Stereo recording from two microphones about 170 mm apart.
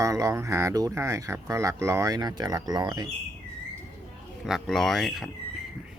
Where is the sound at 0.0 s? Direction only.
20° right (ahead or behind).